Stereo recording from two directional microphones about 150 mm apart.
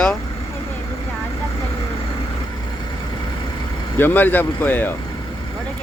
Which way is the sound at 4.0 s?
15° left (ahead or behind).